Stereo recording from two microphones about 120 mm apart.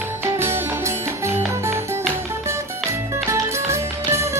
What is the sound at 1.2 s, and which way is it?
Music, 20° right (ahead or behind).